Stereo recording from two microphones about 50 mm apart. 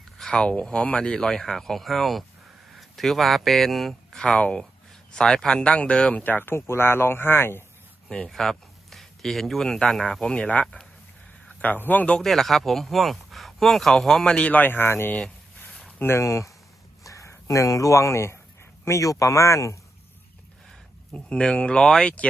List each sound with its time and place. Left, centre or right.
0.3 s speech: left; by 4.2 s centre
4.2 s speech: centre
6.2 s speech: left
8.3 s speech: centre
10.4 s speech: left
12.2 s speech: centre
14.3 s speech: left
14.5 s speech: left
17.0 s speech: left
18.9 s speech: left
21.1 s speech: left